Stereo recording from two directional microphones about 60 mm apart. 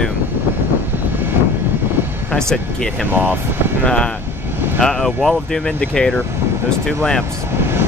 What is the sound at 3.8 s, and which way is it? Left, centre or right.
Speech, centre.